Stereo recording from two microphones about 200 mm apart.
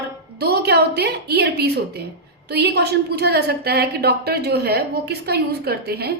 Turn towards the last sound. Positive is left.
turn(degrees=-55)  # may be behind; listen again after turning